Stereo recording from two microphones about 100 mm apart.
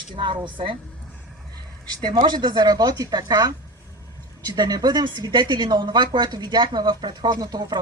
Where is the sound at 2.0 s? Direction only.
50° right (ahead or behind).